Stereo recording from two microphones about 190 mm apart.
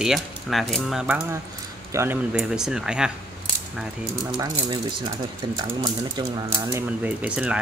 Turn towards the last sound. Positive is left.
turn(degrees=-5)  # may be behind; listen again after turning